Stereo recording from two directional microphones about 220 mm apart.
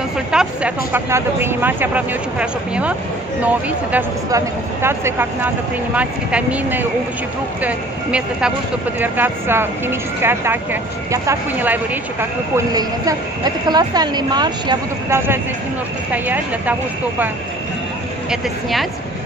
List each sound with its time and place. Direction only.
0.3 s a woman's voice: 5° right (ahead or behind)
18.3 s speech: centre (ahead or behind)